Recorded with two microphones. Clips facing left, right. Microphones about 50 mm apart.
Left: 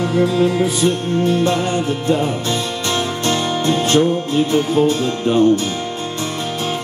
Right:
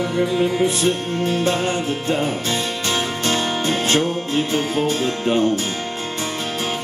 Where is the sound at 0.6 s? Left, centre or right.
Right.